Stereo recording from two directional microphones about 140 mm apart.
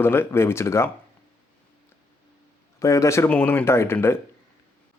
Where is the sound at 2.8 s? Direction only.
25° left (ahead or behind).